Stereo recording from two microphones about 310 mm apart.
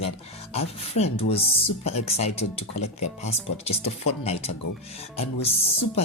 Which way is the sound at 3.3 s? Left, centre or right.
Centre.